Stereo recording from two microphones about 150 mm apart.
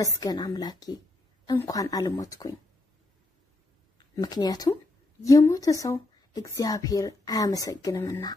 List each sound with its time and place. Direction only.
0.0 s speech: 25° left (ahead or behind)
4.1 s speech: 25° left (ahead or behind)